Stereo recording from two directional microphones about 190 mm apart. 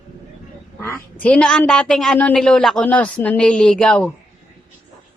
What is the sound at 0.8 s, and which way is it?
Quack, 15° left (ahead or behind).